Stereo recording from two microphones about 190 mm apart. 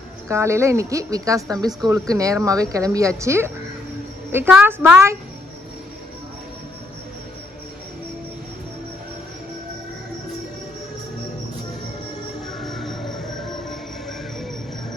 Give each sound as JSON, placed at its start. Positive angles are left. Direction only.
{"t": 0.3, "sound": "speech", "side_deg": -15}
{"t": 12.5, "sound": "music", "side_deg": 0}